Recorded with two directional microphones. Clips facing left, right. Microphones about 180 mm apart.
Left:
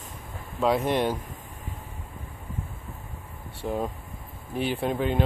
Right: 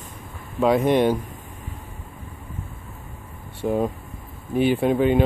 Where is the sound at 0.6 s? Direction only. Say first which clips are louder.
Right 6 dB; centre (ahead or behind).